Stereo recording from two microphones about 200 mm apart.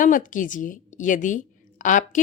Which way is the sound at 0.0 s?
40° left (ahead or behind).